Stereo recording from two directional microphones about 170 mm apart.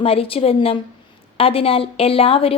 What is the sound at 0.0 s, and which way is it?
A woman's voice, 35° left (ahead or behind).